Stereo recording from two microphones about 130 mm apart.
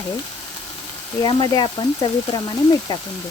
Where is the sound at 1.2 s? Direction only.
35° left (ahead or behind).